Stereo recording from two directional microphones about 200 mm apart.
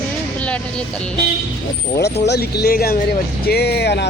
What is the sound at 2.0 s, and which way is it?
Speech, 55° left (ahead or behind).